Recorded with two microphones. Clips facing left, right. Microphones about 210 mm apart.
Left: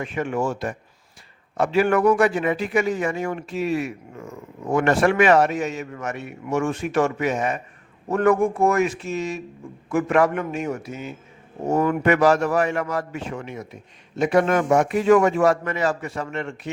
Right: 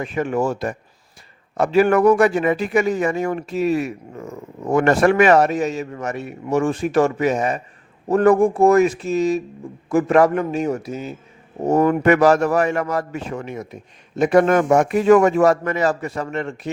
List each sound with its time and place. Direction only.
0.0 s a man's voice: 40° right (ahead or behind)